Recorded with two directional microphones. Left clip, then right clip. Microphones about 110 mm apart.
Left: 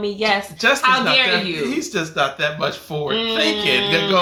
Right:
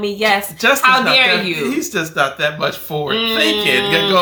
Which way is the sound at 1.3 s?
10° left (ahead or behind).